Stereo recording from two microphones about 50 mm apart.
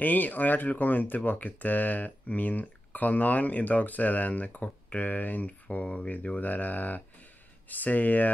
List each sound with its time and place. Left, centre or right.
0.0 s speech: left